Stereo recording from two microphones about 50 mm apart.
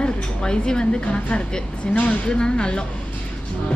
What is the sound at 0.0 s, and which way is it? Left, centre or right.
Speech, centre.